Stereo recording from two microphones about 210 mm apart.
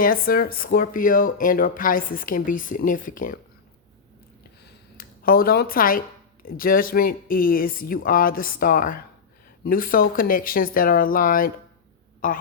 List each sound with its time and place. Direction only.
0.0 s speech: 45° left (ahead or behind)
4.6 s a sound: 45° left (ahead or behind)
6.4 s speech: 45° left (ahead or behind)